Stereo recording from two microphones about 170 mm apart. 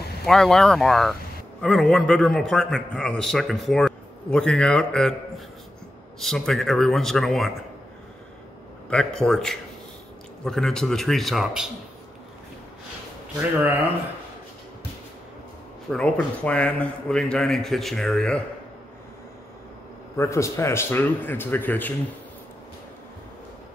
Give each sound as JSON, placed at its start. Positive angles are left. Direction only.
{"t": 0.3, "sound": "a man's voice", "side_deg": 5}
{"t": 6.1, "sound": "a man's voice", "side_deg": 0}
{"t": 8.9, "sound": "a man's voice", "side_deg": 5}
{"t": 13.4, "sound": "speech", "side_deg": -10}
{"t": 15.9, "sound": "a man's voice", "side_deg": 5}
{"t": 20.2, "sound": "a man's voice", "side_deg": 15}